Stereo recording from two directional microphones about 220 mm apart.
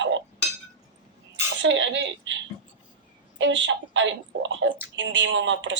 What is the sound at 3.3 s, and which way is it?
Speech, 55° right (ahead or behind).